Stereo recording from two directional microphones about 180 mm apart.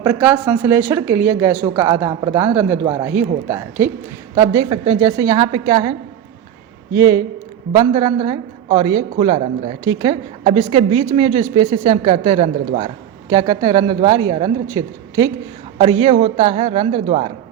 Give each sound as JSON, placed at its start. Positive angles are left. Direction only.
{"t": 0.0, "sound": "a woman's voice", "side_deg": -10}
{"t": 6.9, "sound": "a woman's voice", "side_deg": -20}
{"t": 8.3, "sound": "a woman's voice", "side_deg": -20}
{"t": 10.4, "sound": "a woman's voice", "side_deg": -40}
{"t": 13.3, "sound": "speech", "side_deg": -20}
{"t": 15.8, "sound": "a woman's voice", "side_deg": -35}